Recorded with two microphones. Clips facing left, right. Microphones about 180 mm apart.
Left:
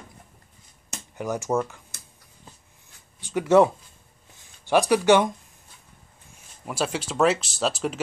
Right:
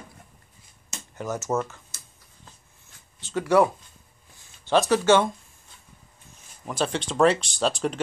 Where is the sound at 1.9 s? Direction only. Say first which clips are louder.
Left 2 dB; 60° left (ahead or behind).